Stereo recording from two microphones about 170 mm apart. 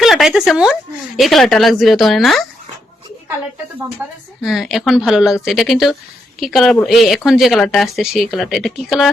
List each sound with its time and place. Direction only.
0.0 s a woman's voice: centre (ahead or behind)
4.4 s a woman's voice: centre (ahead or behind)